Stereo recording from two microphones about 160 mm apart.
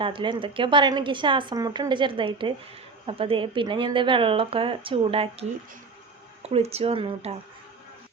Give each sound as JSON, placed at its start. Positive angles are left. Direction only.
{"t": 0.0, "sound": "a woman's voice", "side_deg": -30}